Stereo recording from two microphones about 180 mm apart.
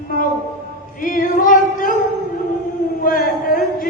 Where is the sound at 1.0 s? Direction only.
50° left (ahead or behind).